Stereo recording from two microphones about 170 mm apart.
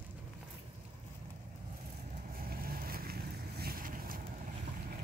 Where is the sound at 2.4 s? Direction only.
60° right (ahead or behind).